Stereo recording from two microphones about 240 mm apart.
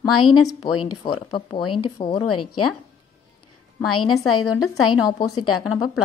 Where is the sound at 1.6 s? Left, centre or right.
Left.